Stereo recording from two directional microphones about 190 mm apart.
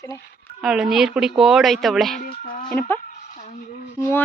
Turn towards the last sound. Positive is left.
turn(degrees=15)  # may be behind; listen again after turning